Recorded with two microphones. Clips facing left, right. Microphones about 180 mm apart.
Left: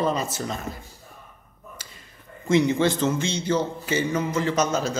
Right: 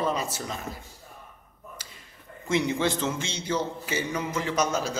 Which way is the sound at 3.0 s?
45° left (ahead or behind).